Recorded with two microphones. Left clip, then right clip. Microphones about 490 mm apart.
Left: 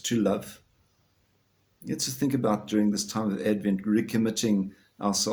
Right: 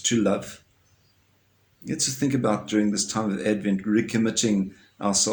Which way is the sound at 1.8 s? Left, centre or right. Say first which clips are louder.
Right 3 dB; left.